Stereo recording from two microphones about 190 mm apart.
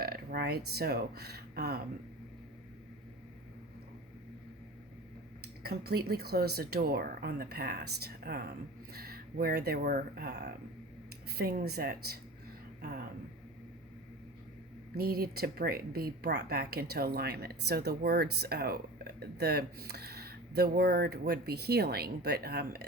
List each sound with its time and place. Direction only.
0.0 s speech: 50° right (ahead or behind)
5.6 s a woman's voice: 55° right (ahead or behind)
14.9 s a woman's voice: 50° right (ahead or behind)